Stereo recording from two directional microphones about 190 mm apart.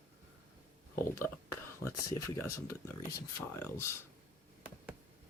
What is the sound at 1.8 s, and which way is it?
Speech, 15° left (ahead or behind).